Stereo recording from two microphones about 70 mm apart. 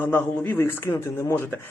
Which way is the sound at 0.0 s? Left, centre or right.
Left.